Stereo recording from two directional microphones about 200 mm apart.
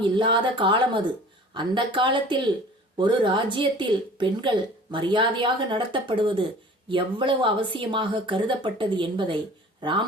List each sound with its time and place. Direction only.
0.0 s a woman's voice: 25° right (ahead or behind)